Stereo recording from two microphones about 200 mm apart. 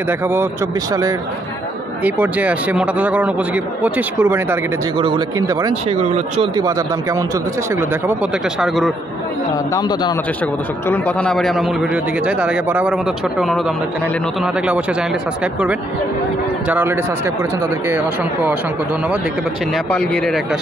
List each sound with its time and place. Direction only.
2.0 s a man's voice: 10° right (ahead or behind)
4.9 s speech: 25° right (ahead or behind)
5.9 s speech: 35° right (ahead or behind)
6.5 s a man's voice: 15° right (ahead or behind); by 8.9 s centre (ahead or behind)
9.8 s a man's voice: 20° left (ahead or behind)
10.9 s a man's voice: 5° left (ahead or behind)
16.6 s a man's voice: 10° right (ahead or behind)
19.7 s a man's voice: 5° left (ahead or behind)